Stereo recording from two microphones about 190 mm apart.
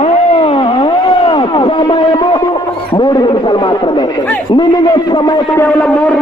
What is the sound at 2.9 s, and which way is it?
A man's voice, 20° left (ahead or behind).